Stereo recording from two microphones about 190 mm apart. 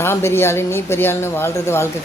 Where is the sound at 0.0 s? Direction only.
15° left (ahead or behind).